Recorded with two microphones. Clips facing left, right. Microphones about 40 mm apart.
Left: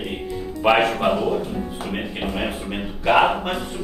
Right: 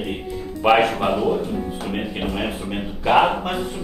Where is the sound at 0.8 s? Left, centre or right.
Centre.